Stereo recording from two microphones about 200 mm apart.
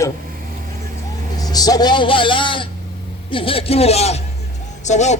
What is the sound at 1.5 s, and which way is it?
A man's voice, 20° left (ahead or behind).